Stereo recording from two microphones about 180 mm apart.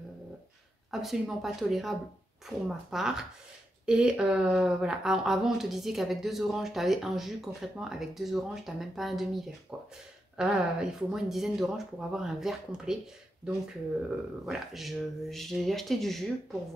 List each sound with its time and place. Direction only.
1.0 s speech: centre (ahead or behind)